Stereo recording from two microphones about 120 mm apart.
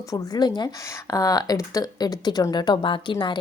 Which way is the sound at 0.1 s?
35° left (ahead or behind).